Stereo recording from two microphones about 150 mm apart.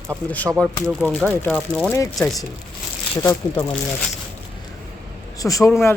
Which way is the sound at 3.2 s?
15° left (ahead or behind).